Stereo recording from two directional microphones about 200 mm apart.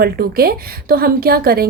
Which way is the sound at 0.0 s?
50° right (ahead or behind).